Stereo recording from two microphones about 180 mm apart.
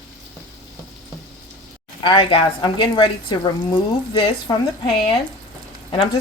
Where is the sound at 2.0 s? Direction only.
25° left (ahead or behind).